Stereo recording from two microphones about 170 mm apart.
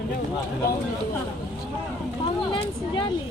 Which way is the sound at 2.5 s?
30° left (ahead or behind).